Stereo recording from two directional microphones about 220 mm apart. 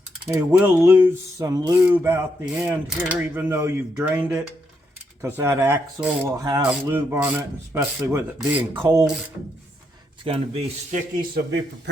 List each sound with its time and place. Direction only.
0.3 s speech: 10° right (ahead or behind)
10.2 s a man's voice: 30° right (ahead or behind)